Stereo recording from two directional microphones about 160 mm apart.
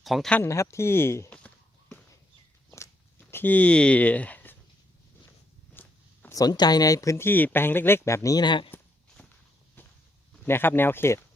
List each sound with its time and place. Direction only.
0.0 s speech: centre (ahead or behind)
0.4 s a sound: 20° left (ahead or behind)
2.6 s walk: 15° left (ahead or behind)
5.7 s a sound: 15° left (ahead or behind)
6.4 s speech: 25° left (ahead or behind)
9.8 s walk: 15° left (ahead or behind)
10.3 s speech: 15° left (ahead or behind)